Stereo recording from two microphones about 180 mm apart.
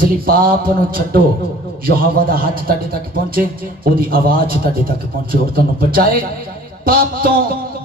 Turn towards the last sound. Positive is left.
turn(degrees=-55)  # may be behind; listen again after turning